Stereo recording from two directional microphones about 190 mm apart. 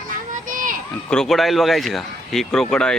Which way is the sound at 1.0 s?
5° left (ahead or behind).